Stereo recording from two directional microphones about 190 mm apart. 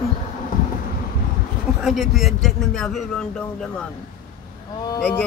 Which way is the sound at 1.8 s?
Centre (ahead or behind).